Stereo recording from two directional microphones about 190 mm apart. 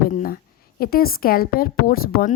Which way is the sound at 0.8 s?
50° left (ahead or behind).